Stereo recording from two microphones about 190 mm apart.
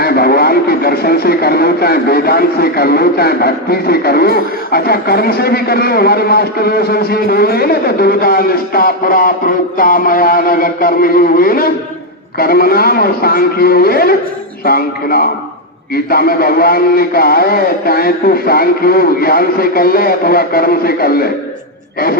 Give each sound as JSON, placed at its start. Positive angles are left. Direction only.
{"t": 0.0, "sound": "speech", "side_deg": 55}